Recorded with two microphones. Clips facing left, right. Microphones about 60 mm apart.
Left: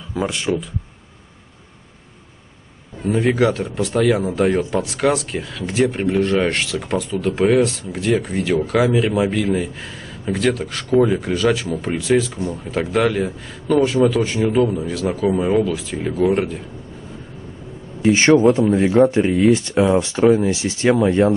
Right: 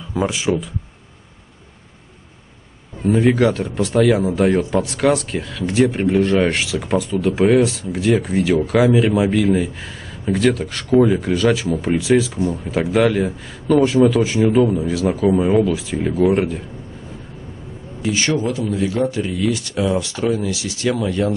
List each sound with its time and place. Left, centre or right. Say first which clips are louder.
0.1 s speech: right 2 dB; centre
3.0 s speech: right 2 dB; centre
18.0 s speech: left 7 dB; left